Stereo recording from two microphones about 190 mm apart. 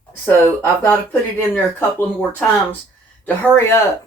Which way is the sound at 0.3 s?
10° left (ahead or behind).